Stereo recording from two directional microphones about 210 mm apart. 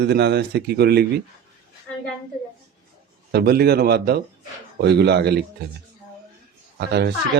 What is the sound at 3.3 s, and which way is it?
Speech, 50° right (ahead or behind).